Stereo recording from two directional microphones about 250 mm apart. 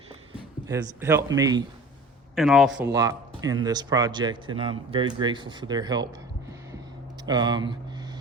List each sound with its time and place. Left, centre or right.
0.7 s speech: centre
2.3 s a man's voice: centre
2.9 s speech: centre
7.3 s speech: centre